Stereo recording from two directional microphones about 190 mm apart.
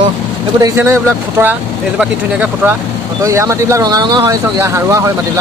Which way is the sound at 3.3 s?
15° right (ahead or behind).